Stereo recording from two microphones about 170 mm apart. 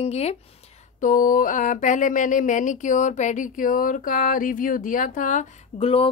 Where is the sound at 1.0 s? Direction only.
50° left (ahead or behind).